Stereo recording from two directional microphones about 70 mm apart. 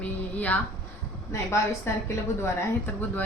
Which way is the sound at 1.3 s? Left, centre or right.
Left.